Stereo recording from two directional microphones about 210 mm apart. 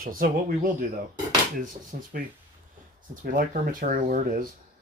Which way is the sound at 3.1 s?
40° right (ahead or behind).